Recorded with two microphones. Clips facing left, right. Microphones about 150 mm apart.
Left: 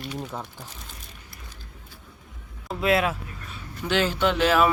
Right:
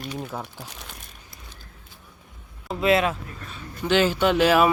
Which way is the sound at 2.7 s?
Centre (ahead or behind).